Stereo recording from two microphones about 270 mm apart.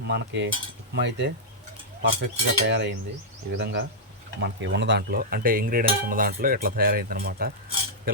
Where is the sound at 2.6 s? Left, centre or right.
Right.